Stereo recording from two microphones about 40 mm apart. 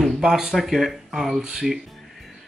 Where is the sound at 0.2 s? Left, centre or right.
Centre.